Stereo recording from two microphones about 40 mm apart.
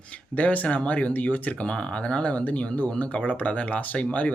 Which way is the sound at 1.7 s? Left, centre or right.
Left.